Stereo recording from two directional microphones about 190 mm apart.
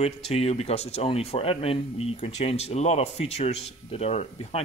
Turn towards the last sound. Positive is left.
turn(degrees=35)  # may be behind; listen again after turning